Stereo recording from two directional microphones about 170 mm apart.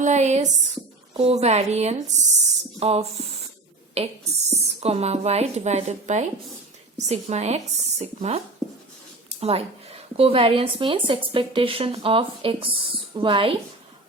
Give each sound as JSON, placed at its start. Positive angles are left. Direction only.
{"t": 0.0, "sound": "a sound", "side_deg": -45}
{"t": 1.1, "sound": "speech", "side_deg": -35}
{"t": 9.4, "sound": "speech", "side_deg": -35}